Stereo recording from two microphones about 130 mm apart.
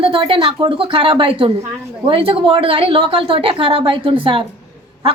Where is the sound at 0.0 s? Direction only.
40° right (ahead or behind).